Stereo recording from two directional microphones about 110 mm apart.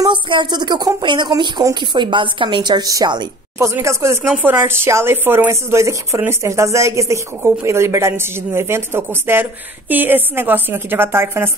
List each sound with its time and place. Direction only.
0.0 s speech: 45° right (ahead or behind)
3.5 s speech: 25° right (ahead or behind)
4.3 s speech: 15° right (ahead or behind)